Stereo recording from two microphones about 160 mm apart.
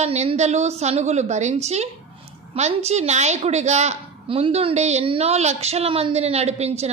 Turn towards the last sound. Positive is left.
turn(degrees=-40)  # may be behind; listen again after turning